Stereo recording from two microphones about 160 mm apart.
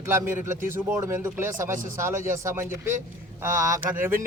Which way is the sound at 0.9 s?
15° right (ahead or behind).